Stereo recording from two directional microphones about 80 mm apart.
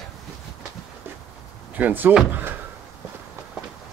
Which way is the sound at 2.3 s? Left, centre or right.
Right.